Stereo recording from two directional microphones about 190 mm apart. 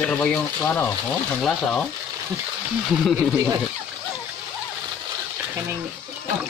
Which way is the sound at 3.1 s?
15° right (ahead or behind).